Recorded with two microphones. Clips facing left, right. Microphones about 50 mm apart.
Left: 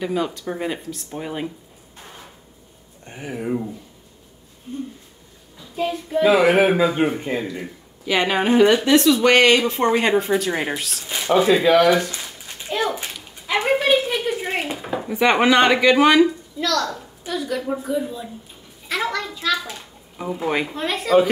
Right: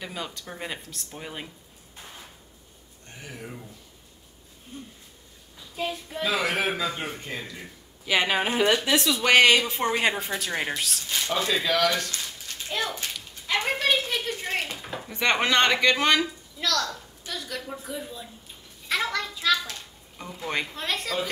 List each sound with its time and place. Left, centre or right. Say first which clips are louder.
0.0 s speech: left 12 dB; centre
3.1 s a man's voice: left 13 dB; left
4.7 s speech: left 12 dB; centre
6.2 s a man's voice: left 11 dB; centre
8.0 s speech: left 4 dB; centre
11.1 s a sound: left 11 dB; centre
16.5 s a woman's voice: left 2 dB; centre